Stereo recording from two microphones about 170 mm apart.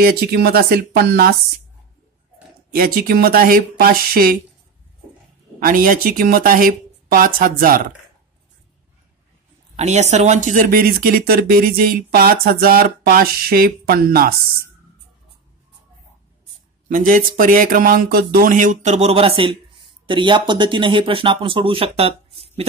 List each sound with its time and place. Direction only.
0.0 s speech: 65° right (ahead or behind)
2.7 s speech: 60° right (ahead or behind)
5.6 s speech: 55° right (ahead or behind)
9.8 s speech: 40° right (ahead or behind); by 14.3 s 60° right (ahead or behind)
16.9 s speech: 50° right (ahead or behind); by 22.7 s 35° right (ahead or behind)